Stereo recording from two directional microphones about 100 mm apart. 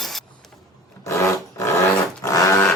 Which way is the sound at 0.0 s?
Centre (ahead or behind).